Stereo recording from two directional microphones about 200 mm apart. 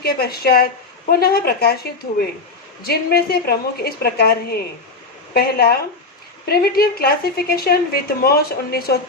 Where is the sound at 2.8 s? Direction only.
50° left (ahead or behind).